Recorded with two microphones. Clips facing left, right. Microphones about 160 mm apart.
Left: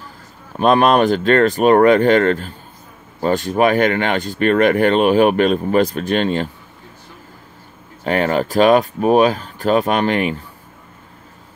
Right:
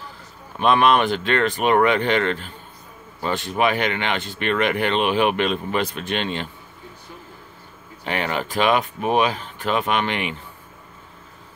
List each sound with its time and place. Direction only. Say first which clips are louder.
0.6 s speech: left 4 dB; 40° left (ahead or behind)
8.0 s speech: left 8 dB; 40° left (ahead or behind)